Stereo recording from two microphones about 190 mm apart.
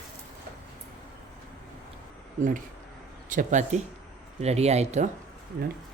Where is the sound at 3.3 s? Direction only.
40° right (ahead or behind).